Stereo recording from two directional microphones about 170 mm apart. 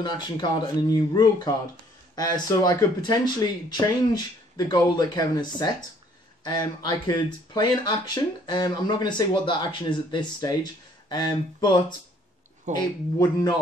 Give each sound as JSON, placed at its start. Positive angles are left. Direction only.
{"t": 0.0, "sound": "speech", "side_deg": 25}
{"t": 12.7, "sound": "speech", "side_deg": -45}
{"t": 13.2, "sound": "speech", "side_deg": 20}